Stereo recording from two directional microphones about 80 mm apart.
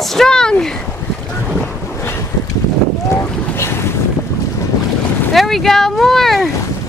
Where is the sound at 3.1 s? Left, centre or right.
Left.